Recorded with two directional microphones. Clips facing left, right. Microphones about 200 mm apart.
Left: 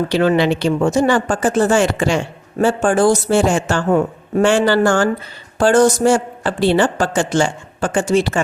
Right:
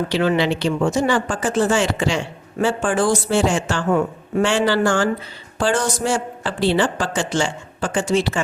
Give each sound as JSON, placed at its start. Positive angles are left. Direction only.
{"t": 0.1, "sound": "speech", "side_deg": 40}